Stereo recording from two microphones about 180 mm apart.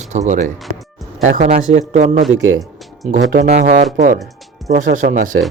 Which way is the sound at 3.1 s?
45° right (ahead or behind).